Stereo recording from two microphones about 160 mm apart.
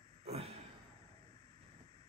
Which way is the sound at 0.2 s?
40° right (ahead or behind).